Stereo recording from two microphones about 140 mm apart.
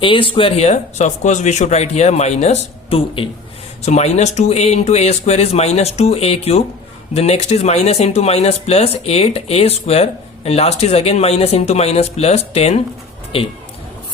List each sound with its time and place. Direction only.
0.0 s speech: 40° left (ahead or behind)